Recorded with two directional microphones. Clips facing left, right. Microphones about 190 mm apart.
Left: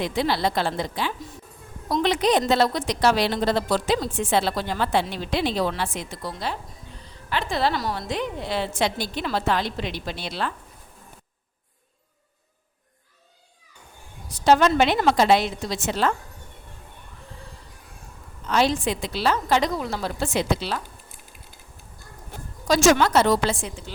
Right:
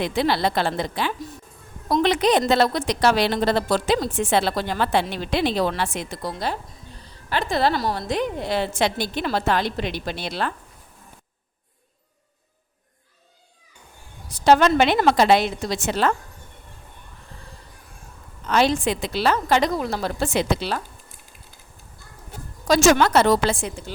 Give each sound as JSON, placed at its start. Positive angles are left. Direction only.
{"t": 0.0, "sound": "a woman's voice", "side_deg": -65}
{"t": 6.2, "sound": "a woman's voice", "side_deg": -40}
{"t": 14.4, "sound": "a woman's voice", "side_deg": -70}
{"t": 18.4, "sound": "a woman's voice", "side_deg": -65}
{"t": 20.2, "sound": "speech", "side_deg": -80}
{"t": 22.6, "sound": "a woman's voice", "side_deg": -60}